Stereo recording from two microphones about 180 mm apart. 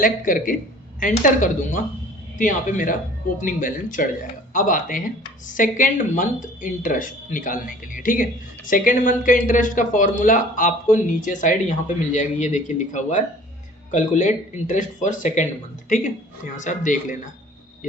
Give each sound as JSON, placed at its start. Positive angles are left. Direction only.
{"t": 0.0, "sound": "speech", "side_deg": 50}
{"t": 16.6, "sound": "speech", "side_deg": 45}